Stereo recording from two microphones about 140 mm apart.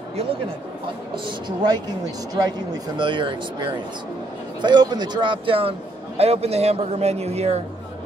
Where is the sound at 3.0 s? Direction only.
35° right (ahead or behind).